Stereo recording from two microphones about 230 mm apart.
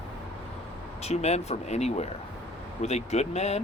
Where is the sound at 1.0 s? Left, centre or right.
Left.